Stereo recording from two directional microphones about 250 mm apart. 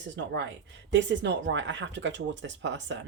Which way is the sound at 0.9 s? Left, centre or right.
Right.